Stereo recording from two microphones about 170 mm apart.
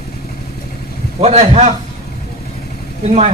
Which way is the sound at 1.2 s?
40° right (ahead or behind).